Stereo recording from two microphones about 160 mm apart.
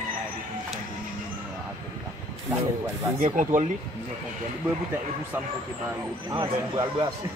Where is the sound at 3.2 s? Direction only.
50° right (ahead or behind).